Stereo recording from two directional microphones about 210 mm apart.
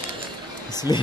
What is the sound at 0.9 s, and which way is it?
Speech, 20° left (ahead or behind).